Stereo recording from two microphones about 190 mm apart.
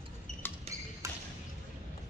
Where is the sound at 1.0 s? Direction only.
15° right (ahead or behind).